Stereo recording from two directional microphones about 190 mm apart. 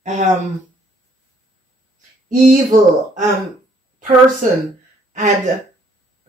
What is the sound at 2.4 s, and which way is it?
Speech, 45° right (ahead or behind).